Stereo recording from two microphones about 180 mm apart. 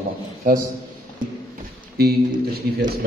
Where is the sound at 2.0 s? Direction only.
60° right (ahead or behind).